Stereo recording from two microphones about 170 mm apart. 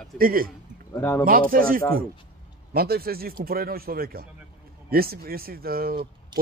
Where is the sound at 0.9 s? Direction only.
15° left (ahead or behind).